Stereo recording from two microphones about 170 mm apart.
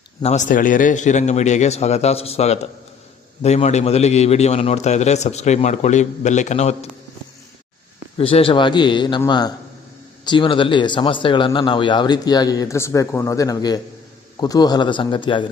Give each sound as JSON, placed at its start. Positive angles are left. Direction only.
{"t": 0.2, "sound": "a man's voice", "side_deg": 40}
{"t": 8.2, "sound": "speech", "side_deg": 35}